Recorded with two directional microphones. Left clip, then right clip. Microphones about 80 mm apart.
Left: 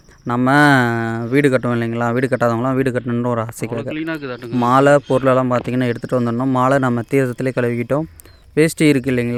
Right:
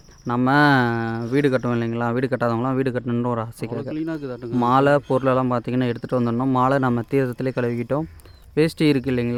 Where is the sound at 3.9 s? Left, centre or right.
Right.